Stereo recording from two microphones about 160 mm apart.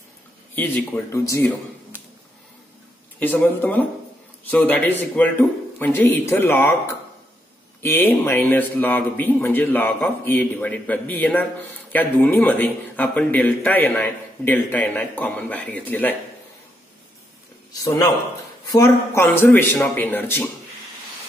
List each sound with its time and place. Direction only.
0.6 s speech: 10° left (ahead or behind)
3.2 s speech: 10° left (ahead or behind)
7.8 s speech: 15° left (ahead or behind)
17.7 s a man's voice: 20° left (ahead or behind)